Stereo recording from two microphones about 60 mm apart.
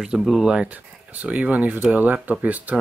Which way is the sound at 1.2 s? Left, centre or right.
Right.